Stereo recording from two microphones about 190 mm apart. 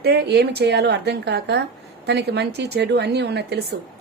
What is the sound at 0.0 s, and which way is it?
A woman's voice, 60° right (ahead or behind).